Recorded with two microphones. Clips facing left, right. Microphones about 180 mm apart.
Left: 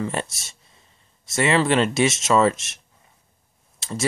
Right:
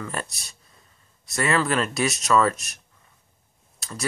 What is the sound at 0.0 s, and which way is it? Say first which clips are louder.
Speech: left 5 dB; 25° left (ahead or behind).